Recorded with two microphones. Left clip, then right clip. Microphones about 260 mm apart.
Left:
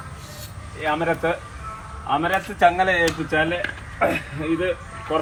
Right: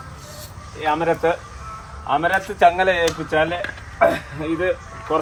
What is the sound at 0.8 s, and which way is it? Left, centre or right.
Speech, right.